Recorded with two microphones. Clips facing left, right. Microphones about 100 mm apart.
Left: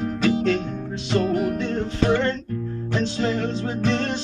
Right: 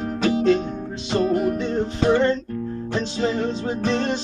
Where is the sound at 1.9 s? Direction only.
25° right (ahead or behind).